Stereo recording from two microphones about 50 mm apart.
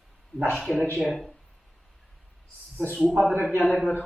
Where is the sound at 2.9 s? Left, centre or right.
Right.